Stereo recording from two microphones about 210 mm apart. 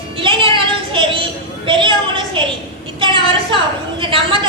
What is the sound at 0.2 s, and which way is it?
Music, 25° right (ahead or behind).